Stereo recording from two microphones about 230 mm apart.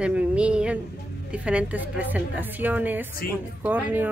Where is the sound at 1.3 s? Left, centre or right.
Centre.